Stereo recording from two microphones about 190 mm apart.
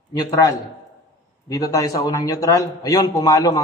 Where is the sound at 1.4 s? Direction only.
20° left (ahead or behind).